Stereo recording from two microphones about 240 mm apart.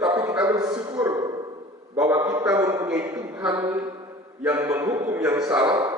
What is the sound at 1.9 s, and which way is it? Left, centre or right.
A man's voice, centre.